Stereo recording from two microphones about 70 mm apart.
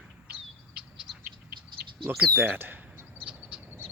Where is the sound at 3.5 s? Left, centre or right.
Centre.